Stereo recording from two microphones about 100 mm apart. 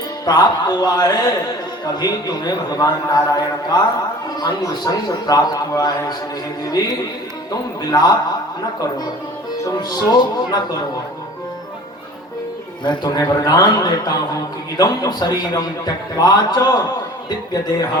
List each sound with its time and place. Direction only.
0.3 s a man's voice: 45° left (ahead or behind)
9.7 s speech: 45° left (ahead or behind)
12.8 s a man's voice: 45° left (ahead or behind)